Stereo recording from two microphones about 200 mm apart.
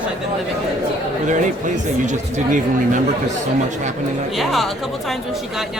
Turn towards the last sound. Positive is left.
turn(degrees=0)  # may be behind; listen again after turning